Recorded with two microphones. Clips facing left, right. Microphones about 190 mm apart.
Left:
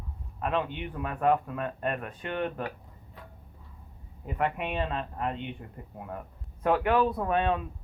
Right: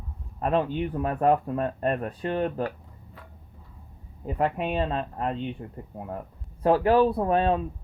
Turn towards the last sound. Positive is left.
turn(degrees=-35)  # may be behind; listen again after turning